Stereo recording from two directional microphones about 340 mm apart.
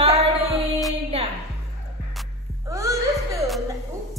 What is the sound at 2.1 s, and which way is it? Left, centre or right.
Music, centre.